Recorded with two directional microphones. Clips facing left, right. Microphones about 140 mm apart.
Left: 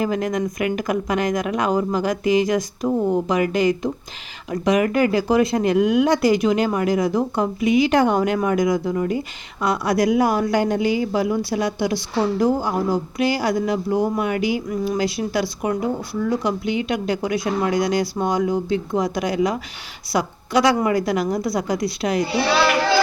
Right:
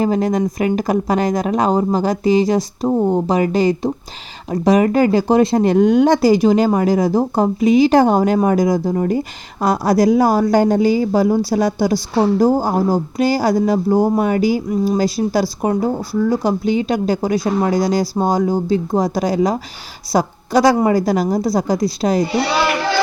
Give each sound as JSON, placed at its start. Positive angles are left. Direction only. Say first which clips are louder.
{"t": 0.0, "sound": "a woman's voice", "louder": "right 5 dB", "side_deg": -35}